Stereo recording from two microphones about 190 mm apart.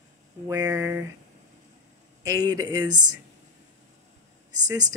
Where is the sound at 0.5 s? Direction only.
15° right (ahead or behind).